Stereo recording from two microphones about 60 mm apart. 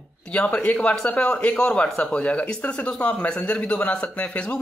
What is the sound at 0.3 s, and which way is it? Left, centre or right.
Speech, left.